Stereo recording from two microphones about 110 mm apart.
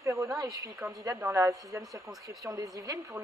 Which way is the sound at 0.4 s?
30° right (ahead or behind).